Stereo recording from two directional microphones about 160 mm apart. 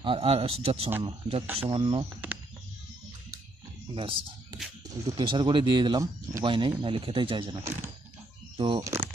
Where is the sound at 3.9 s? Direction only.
30° right (ahead or behind).